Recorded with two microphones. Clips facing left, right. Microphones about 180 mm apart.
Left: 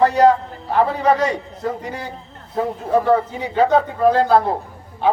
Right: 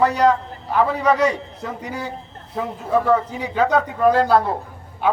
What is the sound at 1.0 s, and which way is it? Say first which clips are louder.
Speech: right 1 dB; 35° left (ahead or behind).